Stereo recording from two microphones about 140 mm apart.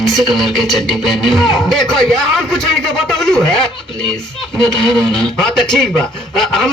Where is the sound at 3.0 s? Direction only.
5° left (ahead or behind).